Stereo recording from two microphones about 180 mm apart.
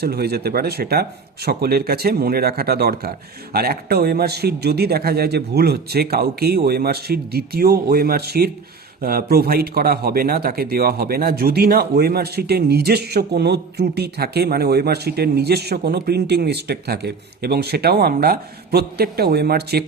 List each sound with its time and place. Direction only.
0.0 s a man's voice: 60° right (ahead or behind)